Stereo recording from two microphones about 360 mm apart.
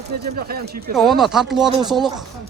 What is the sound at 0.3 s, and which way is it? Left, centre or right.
Speech, right.